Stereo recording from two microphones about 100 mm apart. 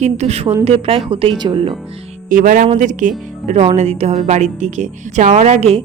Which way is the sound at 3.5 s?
90° right.